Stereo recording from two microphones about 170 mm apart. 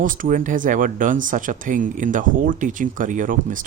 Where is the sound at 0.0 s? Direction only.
50° right (ahead or behind).